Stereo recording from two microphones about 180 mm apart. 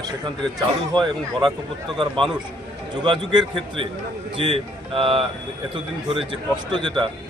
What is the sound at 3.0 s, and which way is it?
A man's voice, 25° right (ahead or behind).